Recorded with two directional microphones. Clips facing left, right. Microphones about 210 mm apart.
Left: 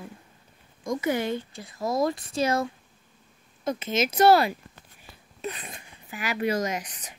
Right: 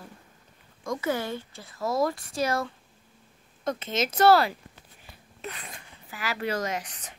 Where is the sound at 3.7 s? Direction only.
10° left (ahead or behind).